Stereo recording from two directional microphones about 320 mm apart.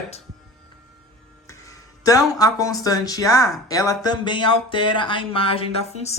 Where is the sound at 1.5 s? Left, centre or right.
Centre.